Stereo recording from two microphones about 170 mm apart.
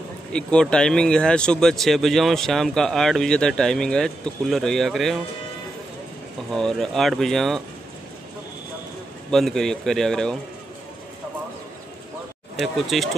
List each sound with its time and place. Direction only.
0.3 s speech: 5° left (ahead or behind)
6.5 s speech: centre (ahead or behind)
9.3 s speech: 5° left (ahead or behind)
12.7 s speech: centre (ahead or behind)